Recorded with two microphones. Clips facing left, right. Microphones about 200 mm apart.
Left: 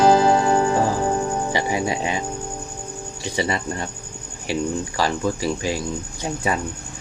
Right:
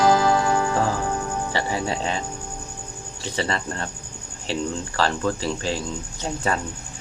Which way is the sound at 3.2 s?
15° left (ahead or behind).